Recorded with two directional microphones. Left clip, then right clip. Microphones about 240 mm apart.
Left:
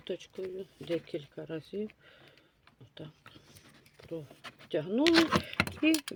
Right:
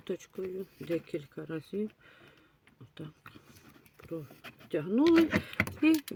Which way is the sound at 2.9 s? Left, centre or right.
Right.